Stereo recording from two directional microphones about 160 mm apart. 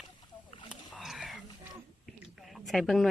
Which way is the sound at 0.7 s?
Centre (ahead or behind).